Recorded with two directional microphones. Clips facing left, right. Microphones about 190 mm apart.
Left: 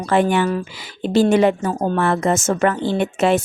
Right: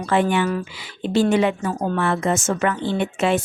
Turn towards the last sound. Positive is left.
turn(degrees=40)  # may be behind; listen again after turning